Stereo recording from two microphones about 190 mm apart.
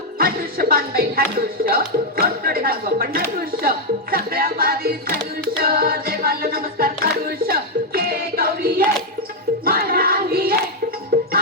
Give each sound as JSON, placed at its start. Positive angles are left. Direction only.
{"t": 0.2, "sound": "music", "side_deg": -50}
{"t": 8.1, "sound": "a sound", "side_deg": -50}
{"t": 9.6, "sound": "child singing", "side_deg": -50}
{"t": 11.1, "sound": "music", "side_deg": -50}